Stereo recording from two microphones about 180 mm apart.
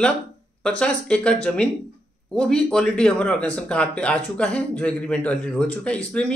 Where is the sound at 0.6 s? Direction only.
5° left (ahead or behind).